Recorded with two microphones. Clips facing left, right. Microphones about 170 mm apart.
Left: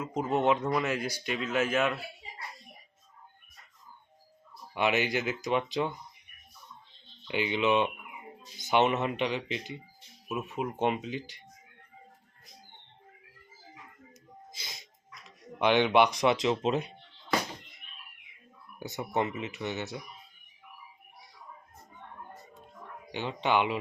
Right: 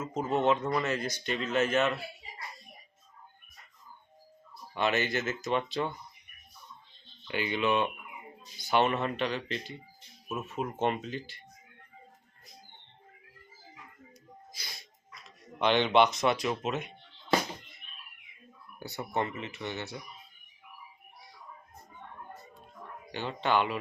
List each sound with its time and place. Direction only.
0.0 s speech: 15° left (ahead or behind)
4.7 s speech: 15° left (ahead or behind)
7.3 s speech: 15° left (ahead or behind)
10.5 s speech: 5° left (ahead or behind)
14.5 s a sound: 20° left (ahead or behind)
18.8 s speech: 15° left (ahead or behind)
23.1 s speech: 15° left (ahead or behind)